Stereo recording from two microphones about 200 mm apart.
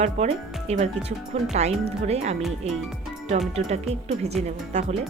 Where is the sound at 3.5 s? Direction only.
35° right (ahead or behind).